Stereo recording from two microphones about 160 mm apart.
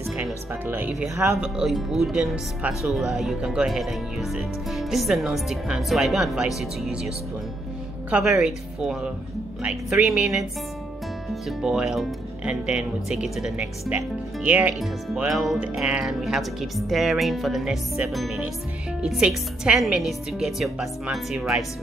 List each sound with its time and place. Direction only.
0.7 s speech: 10° right (ahead or behind)
1.1 s speech: 20° right (ahead or behind)
1.4 s speech: centre (ahead or behind)
8.1 s speech: 5° right (ahead or behind)
11.4 s speech: 5° right (ahead or behind)